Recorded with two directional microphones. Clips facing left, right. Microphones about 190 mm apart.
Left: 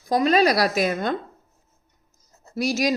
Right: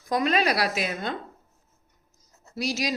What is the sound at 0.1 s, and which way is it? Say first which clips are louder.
A woman's voice: left 5 dB; 35° left (ahead or behind).